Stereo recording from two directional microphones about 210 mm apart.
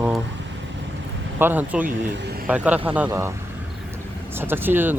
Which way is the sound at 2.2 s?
50° right (ahead or behind).